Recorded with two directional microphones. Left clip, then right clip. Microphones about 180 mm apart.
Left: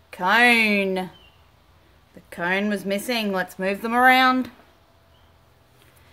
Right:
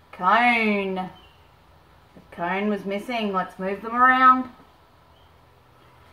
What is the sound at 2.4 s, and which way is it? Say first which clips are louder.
Speech: left 2 dB; 50° left (ahead or behind).